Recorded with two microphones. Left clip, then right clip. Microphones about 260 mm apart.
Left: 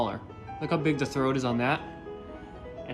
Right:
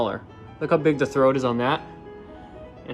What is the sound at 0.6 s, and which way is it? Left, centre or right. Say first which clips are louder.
Speech: right 8 dB; centre.